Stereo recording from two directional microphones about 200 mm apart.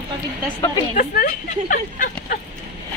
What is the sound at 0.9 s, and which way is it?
Speech, 40° left (ahead or behind).